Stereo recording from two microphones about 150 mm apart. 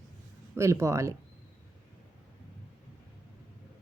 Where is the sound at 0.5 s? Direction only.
20° right (ahead or behind).